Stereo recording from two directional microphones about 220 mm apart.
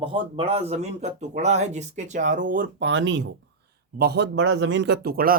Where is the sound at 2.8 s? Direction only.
55° right (ahead or behind).